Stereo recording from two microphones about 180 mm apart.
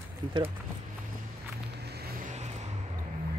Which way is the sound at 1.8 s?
65° right (ahead or behind).